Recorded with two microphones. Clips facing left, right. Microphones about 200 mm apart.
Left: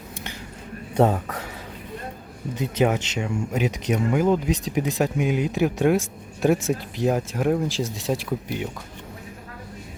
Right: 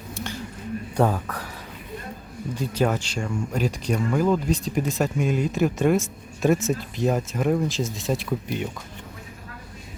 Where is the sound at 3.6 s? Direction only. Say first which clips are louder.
Left 1 dB; 20° left (ahead or behind).